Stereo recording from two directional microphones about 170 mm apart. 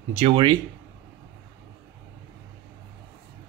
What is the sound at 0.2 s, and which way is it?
Speech, 30° right (ahead or behind).